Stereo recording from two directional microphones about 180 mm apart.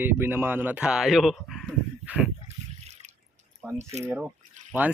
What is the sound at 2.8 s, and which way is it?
Drip, 40° right (ahead or behind).